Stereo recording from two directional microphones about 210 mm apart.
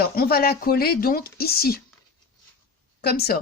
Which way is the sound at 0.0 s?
45° left (ahead or behind).